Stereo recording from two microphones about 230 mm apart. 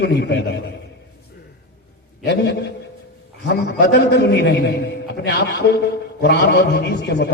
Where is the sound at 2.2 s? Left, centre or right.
Left.